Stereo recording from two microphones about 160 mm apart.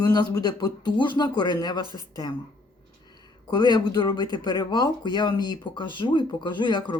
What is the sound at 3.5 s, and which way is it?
Speech, 25° left (ahead or behind).